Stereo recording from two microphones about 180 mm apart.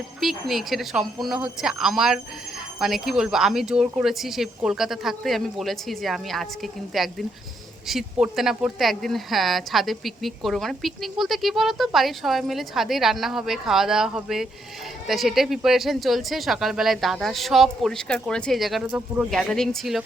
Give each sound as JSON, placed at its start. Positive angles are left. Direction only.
{"t": 0.2, "sound": "speech", "side_deg": 0}